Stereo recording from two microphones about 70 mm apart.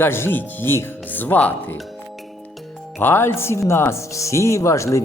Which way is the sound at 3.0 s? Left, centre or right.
Left.